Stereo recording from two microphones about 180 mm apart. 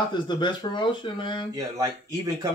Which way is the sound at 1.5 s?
20° right (ahead or behind).